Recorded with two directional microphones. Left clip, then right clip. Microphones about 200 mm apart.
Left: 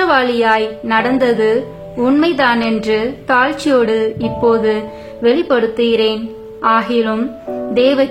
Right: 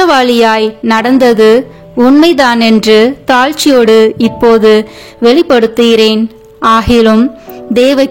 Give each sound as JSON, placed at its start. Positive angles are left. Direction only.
{"t": 0.0, "sound": "a woman's voice", "side_deg": -55}